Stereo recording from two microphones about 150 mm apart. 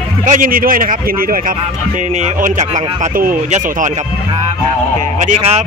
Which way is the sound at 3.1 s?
65° right (ahead or behind).